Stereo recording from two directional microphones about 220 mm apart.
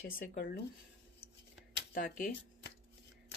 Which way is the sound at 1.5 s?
50° left (ahead or behind).